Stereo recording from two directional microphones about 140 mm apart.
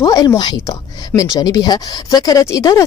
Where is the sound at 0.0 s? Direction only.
25° left (ahead or behind).